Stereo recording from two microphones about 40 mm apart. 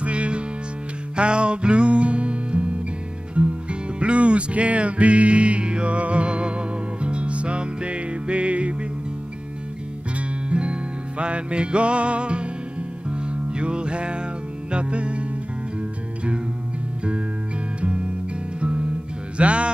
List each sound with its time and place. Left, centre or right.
0.0 s music: right
10.1 s music: right
17.7 s music: right